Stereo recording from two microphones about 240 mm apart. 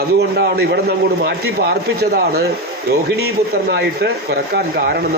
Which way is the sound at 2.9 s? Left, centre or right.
Right.